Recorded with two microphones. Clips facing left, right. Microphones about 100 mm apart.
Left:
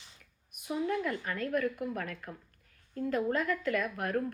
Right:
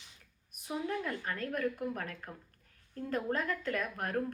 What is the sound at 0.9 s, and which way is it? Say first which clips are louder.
Speech: left 2 dB; 35° right (ahead or behind).